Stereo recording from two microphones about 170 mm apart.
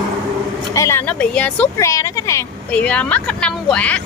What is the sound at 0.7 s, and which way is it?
Speech, 15° left (ahead or behind).